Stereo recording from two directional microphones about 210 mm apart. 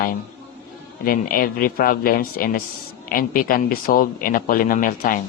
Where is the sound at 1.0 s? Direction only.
45° left (ahead or behind).